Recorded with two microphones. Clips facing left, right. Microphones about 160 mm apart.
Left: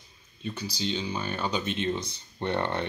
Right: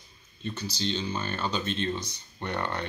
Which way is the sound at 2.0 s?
25° left (ahead or behind).